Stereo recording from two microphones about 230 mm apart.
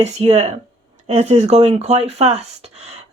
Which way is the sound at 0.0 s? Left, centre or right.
Right.